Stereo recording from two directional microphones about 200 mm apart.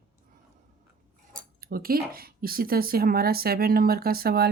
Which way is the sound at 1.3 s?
45° right (ahead or behind).